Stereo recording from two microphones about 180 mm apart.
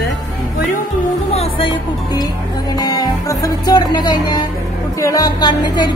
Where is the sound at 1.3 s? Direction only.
35° left (ahead or behind).